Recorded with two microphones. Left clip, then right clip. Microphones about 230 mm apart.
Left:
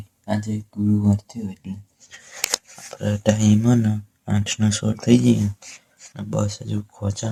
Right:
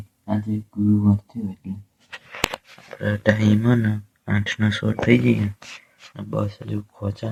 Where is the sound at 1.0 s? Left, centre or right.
Centre.